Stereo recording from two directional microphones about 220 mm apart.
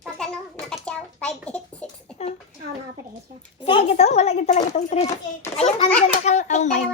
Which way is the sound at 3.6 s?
25° left (ahead or behind).